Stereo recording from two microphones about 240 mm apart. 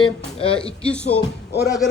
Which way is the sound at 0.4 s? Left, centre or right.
Left.